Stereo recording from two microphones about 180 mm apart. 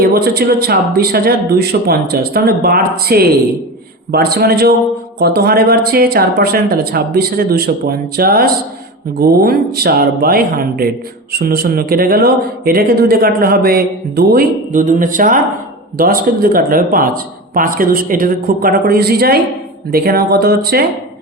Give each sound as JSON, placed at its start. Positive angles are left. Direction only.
{"t": 0.0, "sound": "speech", "side_deg": -60}